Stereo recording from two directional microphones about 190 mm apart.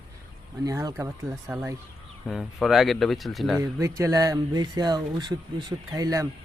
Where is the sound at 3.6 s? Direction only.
15° right (ahead or behind).